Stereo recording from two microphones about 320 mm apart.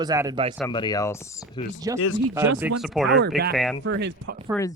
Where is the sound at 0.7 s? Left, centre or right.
Centre.